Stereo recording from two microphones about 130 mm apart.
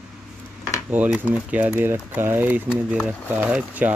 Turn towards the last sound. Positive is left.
turn(degrees=-10)  # may be behind; listen again after turning